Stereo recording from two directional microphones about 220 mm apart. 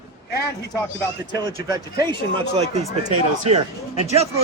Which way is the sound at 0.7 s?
10° left (ahead or behind).